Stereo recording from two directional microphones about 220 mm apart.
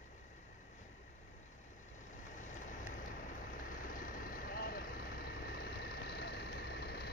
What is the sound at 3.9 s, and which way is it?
Vehicle, 40° left (ahead or behind).